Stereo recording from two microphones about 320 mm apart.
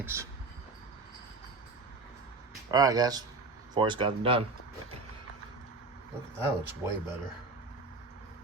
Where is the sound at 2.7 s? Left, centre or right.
Centre.